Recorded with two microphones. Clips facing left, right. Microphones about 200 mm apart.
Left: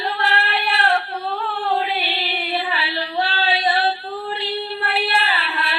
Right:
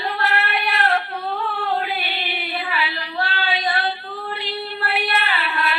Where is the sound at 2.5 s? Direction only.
30° left (ahead or behind).